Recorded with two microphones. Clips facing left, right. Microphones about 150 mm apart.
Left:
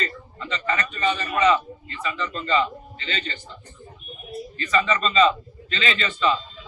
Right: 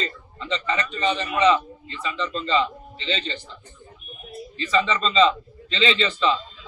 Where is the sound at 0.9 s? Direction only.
20° right (ahead or behind).